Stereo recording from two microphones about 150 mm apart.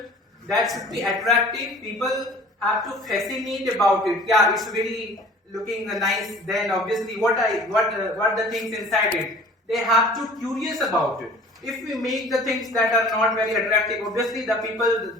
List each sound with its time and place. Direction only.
0.5 s a man's voice: centre (ahead or behind)